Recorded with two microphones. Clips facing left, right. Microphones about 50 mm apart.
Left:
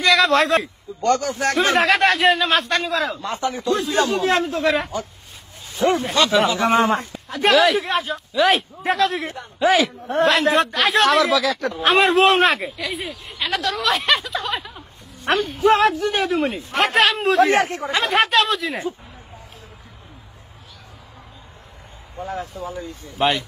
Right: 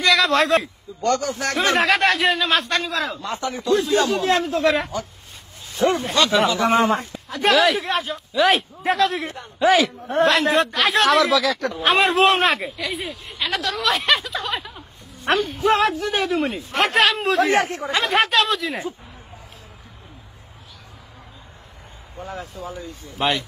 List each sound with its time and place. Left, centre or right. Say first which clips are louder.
0.0 s a man's voice: left 2 dB; centre
3.2 s speech: left 2 dB; left
4.3 s speech: even; left
4.6 s a man's voice: right 1 dB; centre
17.5 s speech: left 1 dB; left
17.9 s a man's voice: left 1 dB; centre
22.2 s speech: left 4 dB; left
23.2 s a man's voice: left 2 dB; centre